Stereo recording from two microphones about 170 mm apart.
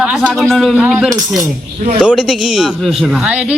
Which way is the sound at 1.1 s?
20° right (ahead or behind).